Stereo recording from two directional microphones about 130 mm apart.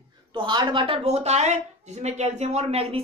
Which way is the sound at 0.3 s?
40° right (ahead or behind).